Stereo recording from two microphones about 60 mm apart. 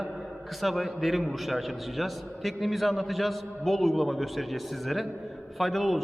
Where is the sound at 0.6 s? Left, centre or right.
Centre.